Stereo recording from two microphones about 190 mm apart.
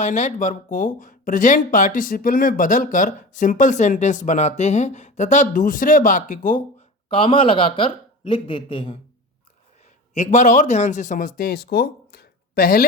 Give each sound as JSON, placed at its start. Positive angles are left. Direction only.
{"t": 0.0, "sound": "speech", "side_deg": 40}
{"t": 7.1, "sound": "a man's voice", "side_deg": 30}
{"t": 10.2, "sound": "speech", "side_deg": 40}